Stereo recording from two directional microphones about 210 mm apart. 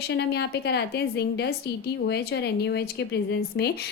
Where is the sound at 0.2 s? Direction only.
55° left (ahead or behind).